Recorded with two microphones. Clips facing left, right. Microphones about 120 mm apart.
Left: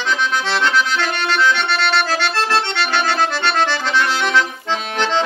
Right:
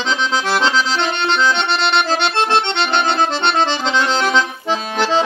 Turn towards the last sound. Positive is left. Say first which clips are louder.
# right 2 dB
turn(degrees=-10)  # may be behind; listen again after turning